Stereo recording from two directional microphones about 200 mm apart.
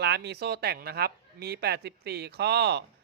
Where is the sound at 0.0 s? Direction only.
55° right (ahead or behind).